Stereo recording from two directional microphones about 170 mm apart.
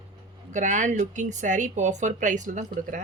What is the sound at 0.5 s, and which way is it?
Speech, 45° right (ahead or behind).